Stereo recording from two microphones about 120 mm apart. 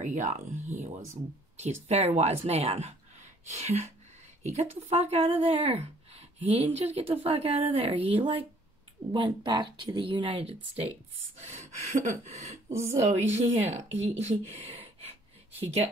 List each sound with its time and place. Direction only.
0.0 s speech: 85° right
1.6 s speech: 65° right (ahead or behind)
11.3 s gasp: 70° right (ahead or behind)
13.1 s speech: 60° right (ahead or behind)